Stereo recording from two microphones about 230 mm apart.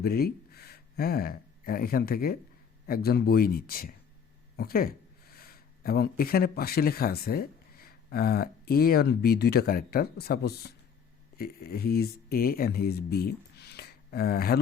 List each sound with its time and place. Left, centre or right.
0.0 s speech: left